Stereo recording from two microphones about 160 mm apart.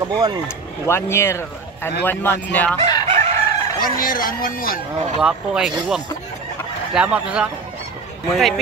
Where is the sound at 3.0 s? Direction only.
35° right (ahead or behind).